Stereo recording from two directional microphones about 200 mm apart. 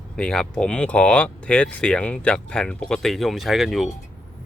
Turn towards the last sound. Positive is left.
turn(degrees=0)  # may be behind; listen again after turning